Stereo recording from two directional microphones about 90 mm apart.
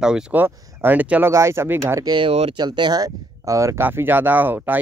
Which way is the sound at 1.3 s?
30° right (ahead or behind).